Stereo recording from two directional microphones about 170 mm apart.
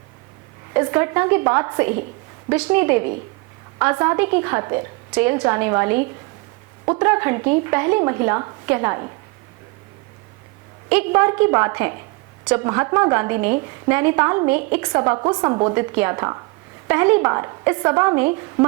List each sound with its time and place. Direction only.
0.7 s a woman's voice: 15° right (ahead or behind)
10.8 s speech: 10° right (ahead or behind)